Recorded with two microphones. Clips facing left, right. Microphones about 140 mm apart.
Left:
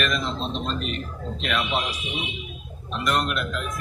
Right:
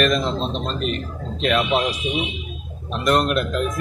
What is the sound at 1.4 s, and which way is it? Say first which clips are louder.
Speech: right 7 dB; 35° right (ahead or behind).